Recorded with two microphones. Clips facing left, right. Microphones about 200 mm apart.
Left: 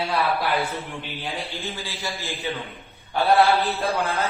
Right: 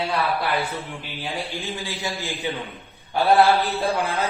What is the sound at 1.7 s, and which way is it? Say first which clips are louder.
Speech: right 3 dB; 15° right (ahead or behind).